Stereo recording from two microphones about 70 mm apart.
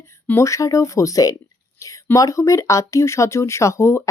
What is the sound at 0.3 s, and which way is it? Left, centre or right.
Speech, left.